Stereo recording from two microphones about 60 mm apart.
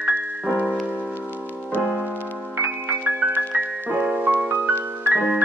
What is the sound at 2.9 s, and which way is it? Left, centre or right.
Music, right.